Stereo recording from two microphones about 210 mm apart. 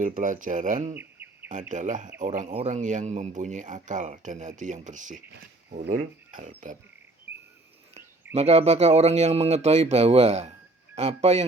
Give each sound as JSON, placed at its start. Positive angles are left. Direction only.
{"t": 0.0, "sound": "speech", "side_deg": -40}
{"t": 0.9, "sound": "bird", "side_deg": -10}
{"t": 1.7, "sound": "speech", "side_deg": -35}
{"t": 8.4, "sound": "speech", "side_deg": -30}